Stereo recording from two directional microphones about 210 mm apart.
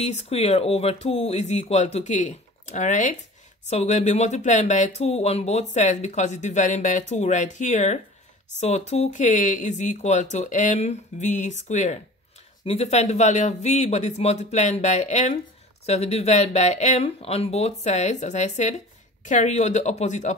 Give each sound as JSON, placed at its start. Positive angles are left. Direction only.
{"t": 0.0, "sound": "speech", "side_deg": 30}